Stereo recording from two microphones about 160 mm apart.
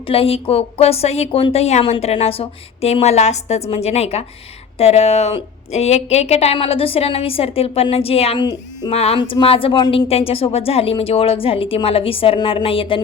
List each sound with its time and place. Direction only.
0.1 s a woman's voice: 35° left (ahead or behind)
10.1 s a woman's voice: 35° left (ahead or behind)